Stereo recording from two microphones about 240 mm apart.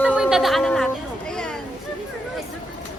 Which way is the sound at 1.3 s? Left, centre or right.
Centre.